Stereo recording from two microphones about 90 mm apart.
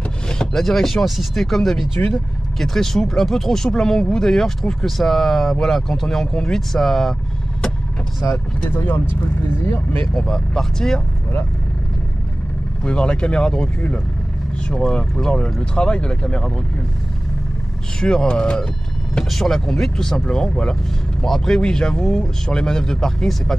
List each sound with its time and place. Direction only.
0.3 s speech: 5° left (ahead or behind)
8.5 s speech: 20° left (ahead or behind)
10.1 s speech: 5° left (ahead or behind)
12.8 s speech: 10° left (ahead or behind)
18.0 s speech: 10° left (ahead or behind)